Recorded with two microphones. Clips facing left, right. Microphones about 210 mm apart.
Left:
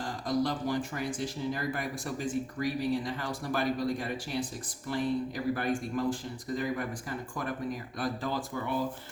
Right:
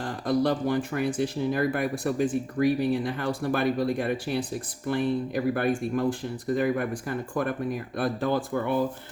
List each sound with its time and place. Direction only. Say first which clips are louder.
0.0 s speech: right 5 dB; 60° right (ahead or behind)